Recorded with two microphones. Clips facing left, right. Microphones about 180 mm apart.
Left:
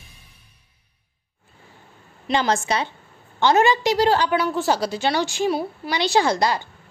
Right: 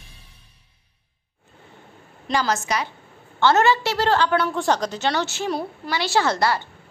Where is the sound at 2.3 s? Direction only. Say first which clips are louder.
Left 2 dB; 25° left (ahead or behind).